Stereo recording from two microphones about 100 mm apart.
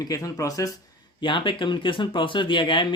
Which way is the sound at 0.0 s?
35° left (ahead or behind).